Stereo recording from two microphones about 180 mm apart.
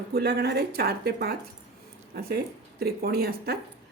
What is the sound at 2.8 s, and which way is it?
Speech, 60° right (ahead or behind).